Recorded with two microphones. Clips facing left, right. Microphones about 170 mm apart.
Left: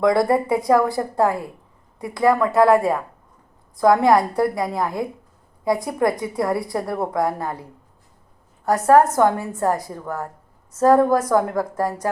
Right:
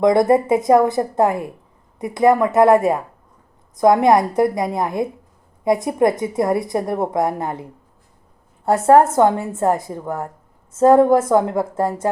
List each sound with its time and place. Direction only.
0.0 s a woman's voice: 20° right (ahead or behind)